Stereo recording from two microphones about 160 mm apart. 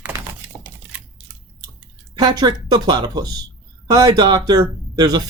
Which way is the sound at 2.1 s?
25° right (ahead or behind).